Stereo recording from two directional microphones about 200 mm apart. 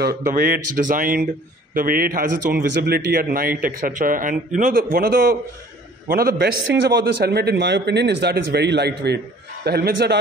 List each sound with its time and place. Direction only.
0.0 s a man's voice: 45° right (ahead or behind)
6.3 s a man's voice: 60° right (ahead or behind)